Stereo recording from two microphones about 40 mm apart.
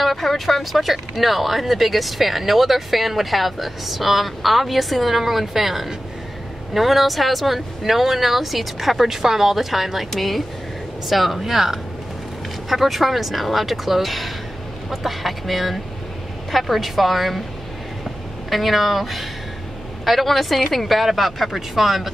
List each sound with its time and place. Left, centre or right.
0.0 s speech: centre
18.5 s speech: centre